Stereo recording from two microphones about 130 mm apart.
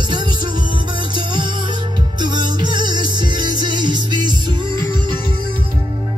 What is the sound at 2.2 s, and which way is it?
Music, 35° right (ahead or behind).